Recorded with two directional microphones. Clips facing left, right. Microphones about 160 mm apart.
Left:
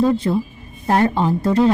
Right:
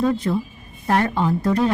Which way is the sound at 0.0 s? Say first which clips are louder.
Left 3 dB; 30° left (ahead or behind).